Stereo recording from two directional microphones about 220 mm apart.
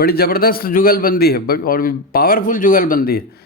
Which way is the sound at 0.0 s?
45° left (ahead or behind).